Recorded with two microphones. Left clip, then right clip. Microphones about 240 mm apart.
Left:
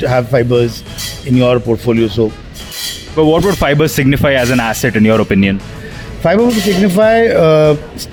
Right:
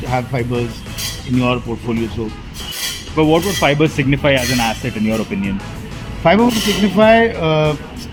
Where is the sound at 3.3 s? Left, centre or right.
Left.